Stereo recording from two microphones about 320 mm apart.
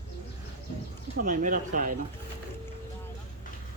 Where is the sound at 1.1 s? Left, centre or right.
Right.